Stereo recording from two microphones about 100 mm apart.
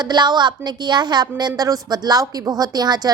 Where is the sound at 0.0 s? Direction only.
45° right (ahead or behind).